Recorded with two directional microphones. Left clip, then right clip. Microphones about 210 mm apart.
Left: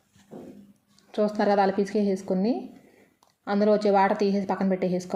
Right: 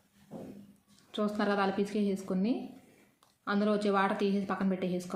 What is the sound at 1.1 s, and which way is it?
A woman's voice, 15° left (ahead or behind).